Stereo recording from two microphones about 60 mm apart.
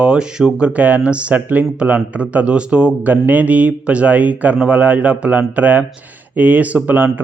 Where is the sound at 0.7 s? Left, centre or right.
Right.